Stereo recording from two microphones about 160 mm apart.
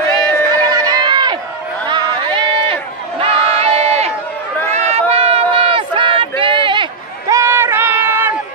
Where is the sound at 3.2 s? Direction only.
35° right (ahead or behind).